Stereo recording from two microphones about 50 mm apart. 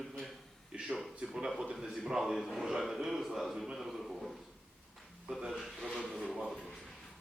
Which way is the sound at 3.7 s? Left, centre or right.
Centre.